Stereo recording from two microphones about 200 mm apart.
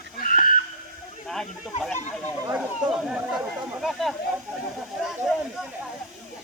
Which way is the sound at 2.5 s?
5° right (ahead or behind).